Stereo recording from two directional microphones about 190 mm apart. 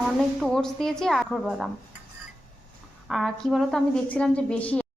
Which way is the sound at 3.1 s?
Centre (ahead or behind).